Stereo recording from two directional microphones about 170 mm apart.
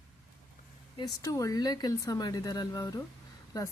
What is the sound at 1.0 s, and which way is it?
Speech, 20° left (ahead or behind).